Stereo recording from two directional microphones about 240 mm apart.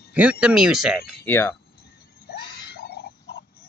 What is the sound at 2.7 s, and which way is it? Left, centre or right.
Pig, left.